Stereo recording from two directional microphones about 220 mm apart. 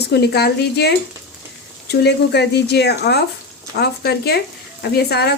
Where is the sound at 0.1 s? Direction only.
50° left (ahead or behind).